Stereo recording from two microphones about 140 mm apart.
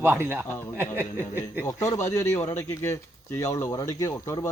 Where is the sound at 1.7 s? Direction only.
25° left (ahead or behind).